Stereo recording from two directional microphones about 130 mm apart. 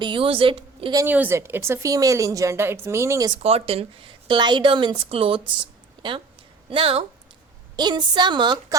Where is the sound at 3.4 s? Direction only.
50° right (ahead or behind).